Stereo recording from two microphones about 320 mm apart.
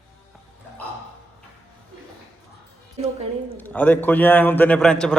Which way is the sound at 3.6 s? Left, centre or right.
Centre.